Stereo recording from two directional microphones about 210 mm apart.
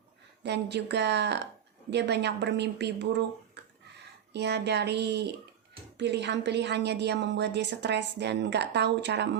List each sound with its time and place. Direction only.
0.4 s a woman's voice: 55° right (ahead or behind)